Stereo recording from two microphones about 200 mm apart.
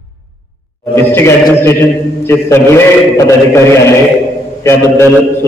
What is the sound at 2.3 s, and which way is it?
A man's voice, 10° left (ahead or behind).